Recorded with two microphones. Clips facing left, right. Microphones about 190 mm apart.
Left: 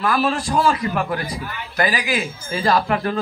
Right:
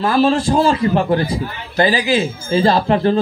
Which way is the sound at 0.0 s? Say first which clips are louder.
Right 6 dB; 30° right (ahead or behind).